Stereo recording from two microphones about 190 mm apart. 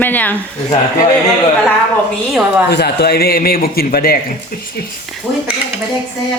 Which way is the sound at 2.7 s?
60° left (ahead or behind).